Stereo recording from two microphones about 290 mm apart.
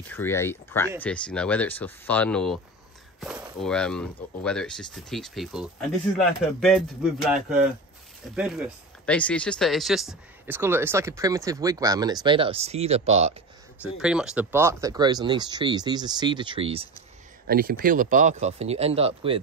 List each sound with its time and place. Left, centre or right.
0.1 s speech: centre; by 13.3 s right
13.9 s speech: centre
17.5 s speech: right